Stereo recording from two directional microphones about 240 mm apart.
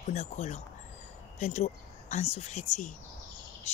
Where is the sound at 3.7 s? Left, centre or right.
Left.